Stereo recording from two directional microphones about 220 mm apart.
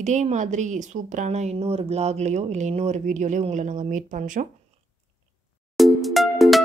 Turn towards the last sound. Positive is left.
turn(degrees=0)  # may be behind; listen again after turning